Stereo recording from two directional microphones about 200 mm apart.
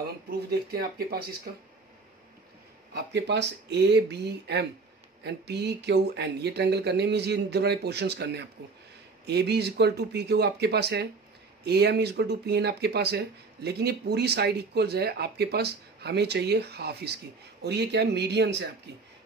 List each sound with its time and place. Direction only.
0.0 s speech: 50° right (ahead or behind)
2.9 s speech: 55° right (ahead or behind)